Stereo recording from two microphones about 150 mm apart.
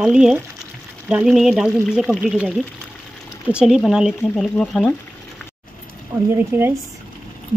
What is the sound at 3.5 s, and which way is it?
Speech, centre (ahead or behind).